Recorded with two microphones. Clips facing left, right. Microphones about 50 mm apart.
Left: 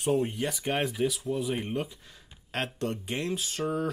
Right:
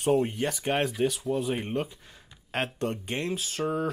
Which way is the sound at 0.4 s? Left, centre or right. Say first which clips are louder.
Right 2 dB; centre.